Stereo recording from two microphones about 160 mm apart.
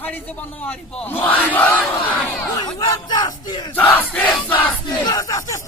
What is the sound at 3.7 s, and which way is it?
Battle cry, 10° left (ahead or behind).